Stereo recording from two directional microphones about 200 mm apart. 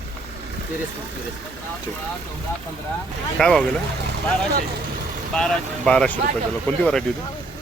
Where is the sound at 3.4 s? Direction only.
5° left (ahead or behind).